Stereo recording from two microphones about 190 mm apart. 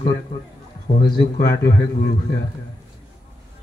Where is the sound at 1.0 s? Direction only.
20° left (ahead or behind).